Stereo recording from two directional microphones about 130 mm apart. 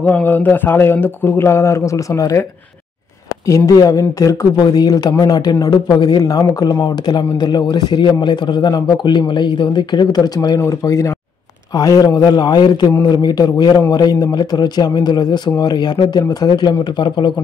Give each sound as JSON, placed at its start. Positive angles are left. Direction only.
{"t": 0.0, "sound": "speech", "side_deg": 15}
{"t": 3.4, "sound": "a man's voice", "side_deg": 25}